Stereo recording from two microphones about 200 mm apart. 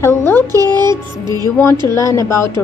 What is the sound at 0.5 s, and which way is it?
Music, 20° right (ahead or behind).